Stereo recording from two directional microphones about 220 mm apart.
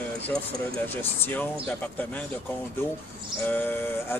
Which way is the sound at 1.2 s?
10° left (ahead or behind).